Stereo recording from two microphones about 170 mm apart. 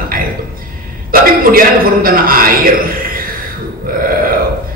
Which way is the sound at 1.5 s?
60° right (ahead or behind).